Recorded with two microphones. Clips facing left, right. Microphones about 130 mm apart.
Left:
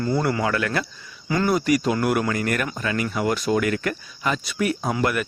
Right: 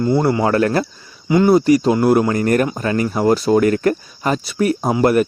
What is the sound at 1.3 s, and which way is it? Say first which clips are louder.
Speech: right 8 dB; 25° right (ahead or behind).